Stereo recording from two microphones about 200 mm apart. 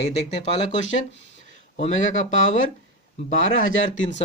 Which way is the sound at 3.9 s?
70° left (ahead or behind).